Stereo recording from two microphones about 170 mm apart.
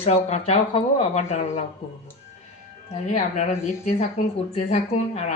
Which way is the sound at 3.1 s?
45° left (ahead or behind).